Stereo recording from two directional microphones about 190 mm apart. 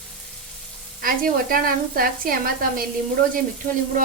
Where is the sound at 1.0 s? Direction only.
50° right (ahead or behind).